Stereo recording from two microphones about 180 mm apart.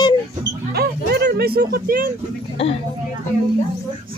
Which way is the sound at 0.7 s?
65° right (ahead or behind).